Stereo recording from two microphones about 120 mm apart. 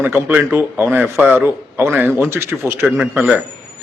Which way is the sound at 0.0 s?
15° right (ahead or behind).